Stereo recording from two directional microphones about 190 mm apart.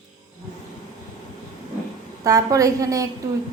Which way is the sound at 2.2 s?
20° right (ahead or behind).